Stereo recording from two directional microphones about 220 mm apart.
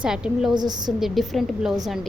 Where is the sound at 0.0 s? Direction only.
5° right (ahead or behind).